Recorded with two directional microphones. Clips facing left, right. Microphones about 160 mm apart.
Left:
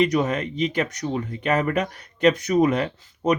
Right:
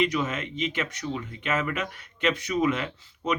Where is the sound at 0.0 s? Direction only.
40° left (ahead or behind).